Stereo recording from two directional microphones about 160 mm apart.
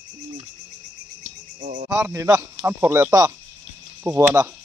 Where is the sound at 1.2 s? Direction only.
50° right (ahead or behind).